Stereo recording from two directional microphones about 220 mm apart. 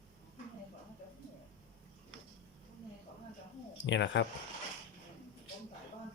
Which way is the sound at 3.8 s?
55° left (ahead or behind).